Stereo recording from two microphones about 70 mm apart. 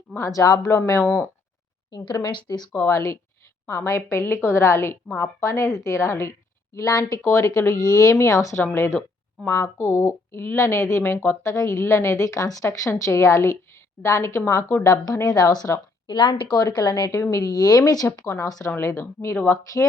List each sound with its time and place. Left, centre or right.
0.2 s a woman's voice: left
2.2 s speech: left
2.9 s a woman's voice: left
6.7 s a woman's voice: left
11.4 s a woman's voice: left
12.9 s a woman's voice: left
15.4 s speech: left
16.0 s speech: left
16.6 s speech: left
18.9 s a woman's voice: left